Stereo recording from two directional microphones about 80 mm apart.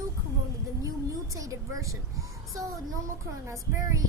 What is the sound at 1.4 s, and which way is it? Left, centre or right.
Speech, right.